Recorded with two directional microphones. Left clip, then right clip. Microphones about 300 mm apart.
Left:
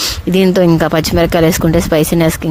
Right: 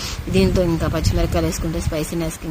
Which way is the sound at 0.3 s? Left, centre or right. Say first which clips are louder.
Left 8 dB; left.